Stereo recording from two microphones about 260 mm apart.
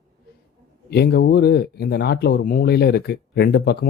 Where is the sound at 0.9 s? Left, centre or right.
Left.